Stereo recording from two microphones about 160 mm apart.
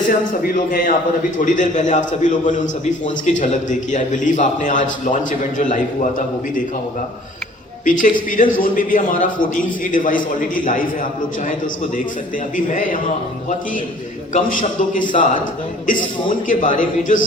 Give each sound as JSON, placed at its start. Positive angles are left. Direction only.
{"t": 0.4, "sound": "a man's voice", "side_deg": 55}
{"t": 7.9, "sound": "a man's voice", "side_deg": 55}
{"t": 12.5, "sound": "a man's voice", "side_deg": 60}
{"t": 14.3, "sound": "a man's voice", "side_deg": 55}